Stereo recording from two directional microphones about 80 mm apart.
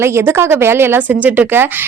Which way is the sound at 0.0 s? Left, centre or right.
Right.